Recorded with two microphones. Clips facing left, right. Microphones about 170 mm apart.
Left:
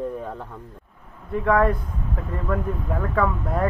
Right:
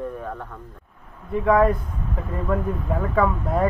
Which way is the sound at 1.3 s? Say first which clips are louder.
Right 2 dB; 5° right (ahead or behind).